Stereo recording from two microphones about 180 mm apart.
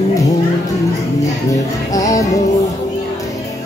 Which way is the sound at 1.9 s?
20° left (ahead or behind).